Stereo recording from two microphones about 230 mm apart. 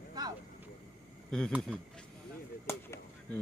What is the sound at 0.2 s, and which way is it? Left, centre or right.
Vehicle, centre.